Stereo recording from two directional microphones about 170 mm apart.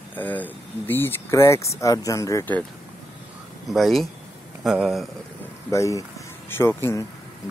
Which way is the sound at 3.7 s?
Centre (ahead or behind).